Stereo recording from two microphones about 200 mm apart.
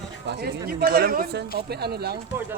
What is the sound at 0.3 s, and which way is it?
Speech, 55° right (ahead or behind).